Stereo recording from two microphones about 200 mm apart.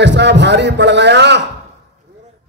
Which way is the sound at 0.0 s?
60° right (ahead or behind).